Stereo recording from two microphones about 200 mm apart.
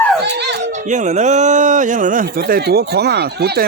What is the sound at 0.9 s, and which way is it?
Speech, 35° right (ahead or behind).